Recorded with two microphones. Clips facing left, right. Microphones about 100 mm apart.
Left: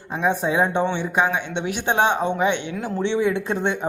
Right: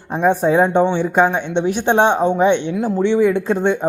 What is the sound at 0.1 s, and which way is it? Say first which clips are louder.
A man's voice: right 6 dB; 50° right (ahead or behind).